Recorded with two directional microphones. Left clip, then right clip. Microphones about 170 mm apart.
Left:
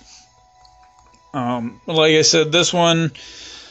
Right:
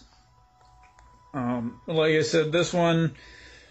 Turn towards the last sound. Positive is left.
turn(degrees=25)  # may be behind; listen again after turning